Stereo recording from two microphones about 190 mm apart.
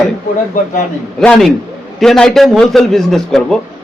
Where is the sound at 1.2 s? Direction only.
5° left (ahead or behind).